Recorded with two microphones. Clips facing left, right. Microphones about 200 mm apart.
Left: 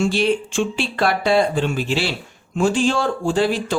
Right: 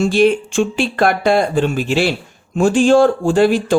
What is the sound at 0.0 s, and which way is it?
Speech, 45° right (ahead or behind).